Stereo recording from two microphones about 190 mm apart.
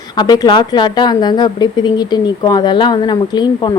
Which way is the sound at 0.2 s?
20° left (ahead or behind).